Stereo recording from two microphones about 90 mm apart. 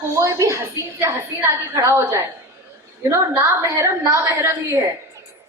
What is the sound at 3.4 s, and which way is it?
A man's voice, 35° right (ahead or behind).